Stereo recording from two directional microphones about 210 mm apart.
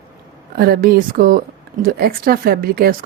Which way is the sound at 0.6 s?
45° right (ahead or behind).